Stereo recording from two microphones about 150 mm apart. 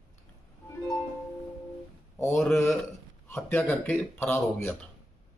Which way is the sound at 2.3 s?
5° left (ahead or behind).